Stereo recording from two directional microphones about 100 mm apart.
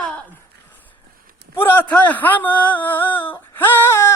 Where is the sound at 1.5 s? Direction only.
20° left (ahead or behind).